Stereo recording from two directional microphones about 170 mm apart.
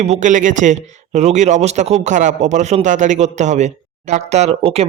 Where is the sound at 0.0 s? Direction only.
45° right (ahead or behind).